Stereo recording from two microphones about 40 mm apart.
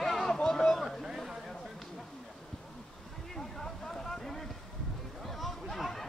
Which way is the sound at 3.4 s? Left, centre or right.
Centre.